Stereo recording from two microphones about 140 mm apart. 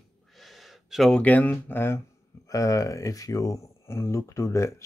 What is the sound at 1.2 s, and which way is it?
Speech, 10° left (ahead or behind).